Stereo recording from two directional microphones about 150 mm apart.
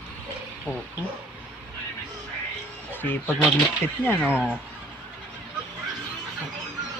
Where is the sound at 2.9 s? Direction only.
15° left (ahead or behind).